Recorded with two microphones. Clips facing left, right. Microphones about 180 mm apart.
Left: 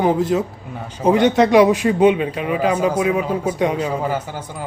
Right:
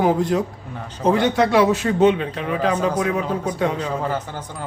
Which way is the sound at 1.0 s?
15° left (ahead or behind).